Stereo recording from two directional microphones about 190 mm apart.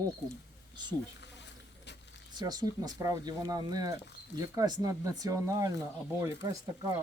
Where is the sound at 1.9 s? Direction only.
65° left (ahead or behind).